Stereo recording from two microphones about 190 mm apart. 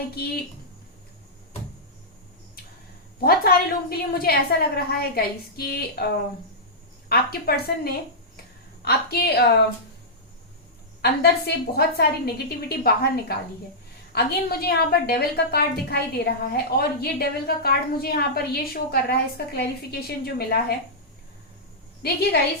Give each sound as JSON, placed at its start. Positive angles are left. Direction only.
{"t": 3.2, "sound": "a woman's voice", "side_deg": 50}
{"t": 7.1, "sound": "a woman's voice", "side_deg": 55}
{"t": 8.8, "sound": "a woman's voice", "side_deg": 55}
{"t": 11.0, "sound": "a woman's voice", "side_deg": 55}
{"t": 22.0, "sound": "a woman's voice", "side_deg": 55}